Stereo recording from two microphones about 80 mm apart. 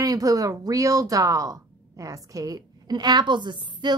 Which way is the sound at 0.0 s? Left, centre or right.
Right.